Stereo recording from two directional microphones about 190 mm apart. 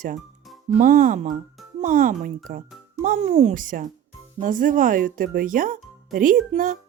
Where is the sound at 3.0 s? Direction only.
40° right (ahead or behind).